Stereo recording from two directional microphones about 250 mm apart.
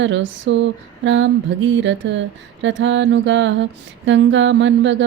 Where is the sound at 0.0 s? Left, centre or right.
Right.